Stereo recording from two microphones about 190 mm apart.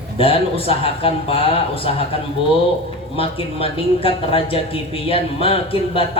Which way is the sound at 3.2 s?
30° left (ahead or behind).